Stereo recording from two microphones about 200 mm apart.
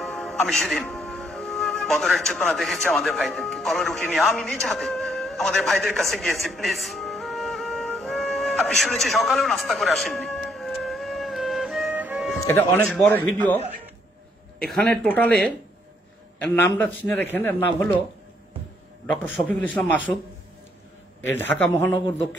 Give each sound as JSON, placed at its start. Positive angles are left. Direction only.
{"t": 0.0, "sound": "music", "side_deg": 0}
{"t": 12.4, "sound": "a man's voice", "side_deg": 10}
{"t": 14.6, "sound": "a man's voice", "side_deg": 5}
{"t": 16.4, "sound": "a man's voice", "side_deg": 10}
{"t": 19.2, "sound": "a man's voice", "side_deg": 10}
{"t": 21.2, "sound": "a man's voice", "side_deg": 10}